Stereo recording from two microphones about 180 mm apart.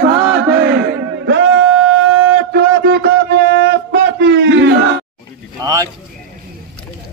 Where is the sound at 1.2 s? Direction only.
80° right.